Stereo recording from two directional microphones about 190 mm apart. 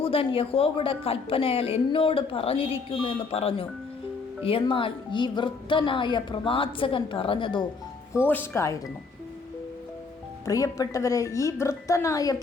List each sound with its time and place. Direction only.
0.0 s a woman's voice: 30° left (ahead or behind)
8.1 s speech: 10° left (ahead or behind)
10.4 s speech: 15° left (ahead or behind)